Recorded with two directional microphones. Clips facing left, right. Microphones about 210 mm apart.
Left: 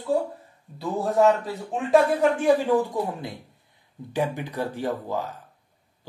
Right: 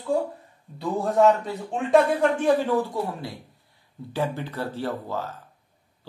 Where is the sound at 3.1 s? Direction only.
20° left (ahead or behind).